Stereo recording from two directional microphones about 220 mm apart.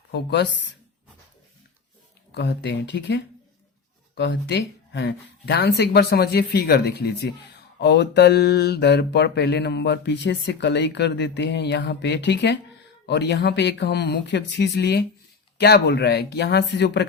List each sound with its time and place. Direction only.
0.1 s speech: 50° left (ahead or behind)
2.3 s speech: 55° left (ahead or behind)
4.2 s speech: 50° left (ahead or behind)